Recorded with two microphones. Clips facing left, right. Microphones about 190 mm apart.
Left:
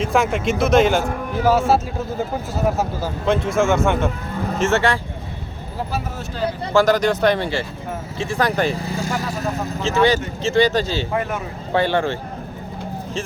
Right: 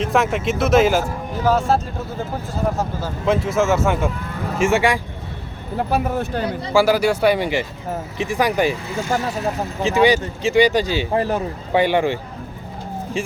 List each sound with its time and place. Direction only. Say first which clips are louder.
0.0 s speech: even; centre (ahead or behind)
1.5 s speech: left 1 dB; 5° left (ahead or behind)
3.2 s speech: even; 5° right (ahead or behind)
5.9 s speech: right 7 dB; 60° right (ahead or behind)
6.7 s speech: even; 10° right (ahead or behind)
8.7 s speech: left 1 dB; 35° left (ahead or behind)
9.0 s speech: right 6 dB; 35° right (ahead or behind)
9.8 s speech: right 2 dB; 15° right (ahead or behind)
11.1 s speech: right 4 dB; 35° right (ahead or behind)
11.7 s speech: right 2 dB; 15° right (ahead or behind)